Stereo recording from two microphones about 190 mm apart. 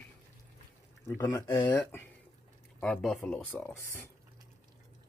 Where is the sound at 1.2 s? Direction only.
10° left (ahead or behind).